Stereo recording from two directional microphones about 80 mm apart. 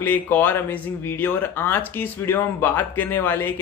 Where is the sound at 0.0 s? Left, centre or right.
Left.